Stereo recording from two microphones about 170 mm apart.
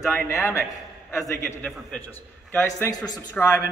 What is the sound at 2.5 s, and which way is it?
A man's voice, 20° left (ahead or behind).